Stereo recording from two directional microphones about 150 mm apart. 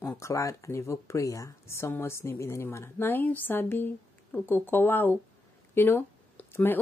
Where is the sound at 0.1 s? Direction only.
20° left (ahead or behind).